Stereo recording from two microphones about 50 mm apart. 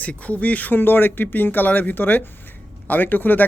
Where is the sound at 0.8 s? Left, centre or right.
Left.